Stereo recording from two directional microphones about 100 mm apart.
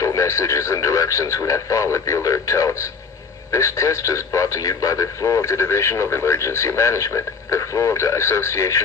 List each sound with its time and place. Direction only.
0.0 s speech: 35° left (ahead or behind)